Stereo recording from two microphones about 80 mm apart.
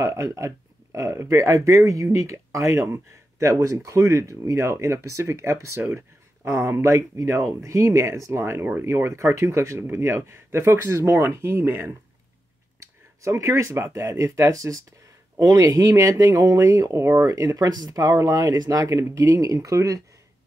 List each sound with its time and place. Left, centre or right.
0.0 s speech: right
13.2 s speech: right